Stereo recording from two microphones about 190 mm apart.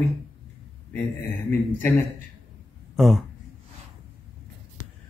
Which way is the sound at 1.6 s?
Centre (ahead or behind).